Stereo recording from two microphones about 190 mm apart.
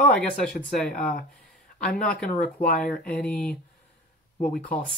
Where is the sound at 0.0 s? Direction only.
5° left (ahead or behind).